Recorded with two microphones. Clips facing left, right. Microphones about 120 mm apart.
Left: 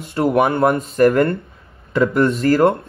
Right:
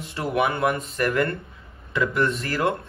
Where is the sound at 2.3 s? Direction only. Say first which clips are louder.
Left 11 dB; 50° left (ahead or behind).